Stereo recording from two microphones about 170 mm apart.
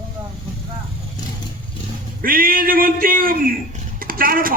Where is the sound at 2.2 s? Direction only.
55° right (ahead or behind).